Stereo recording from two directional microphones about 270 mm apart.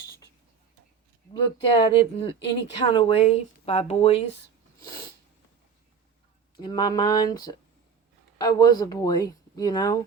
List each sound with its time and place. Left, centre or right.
1.8 s speech: centre
6.6 s speech: centre